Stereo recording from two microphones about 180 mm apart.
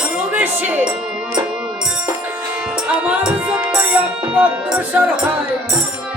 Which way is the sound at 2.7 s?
5° right (ahead or behind).